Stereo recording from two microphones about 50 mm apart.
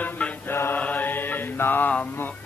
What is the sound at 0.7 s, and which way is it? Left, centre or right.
Mantra, left.